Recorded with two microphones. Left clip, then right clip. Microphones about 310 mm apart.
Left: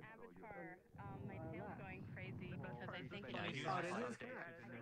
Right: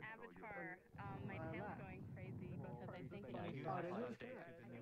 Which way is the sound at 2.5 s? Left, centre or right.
Left.